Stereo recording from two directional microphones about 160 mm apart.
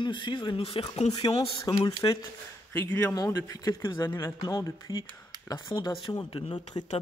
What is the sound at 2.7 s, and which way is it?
A man's voice, 10° left (ahead or behind).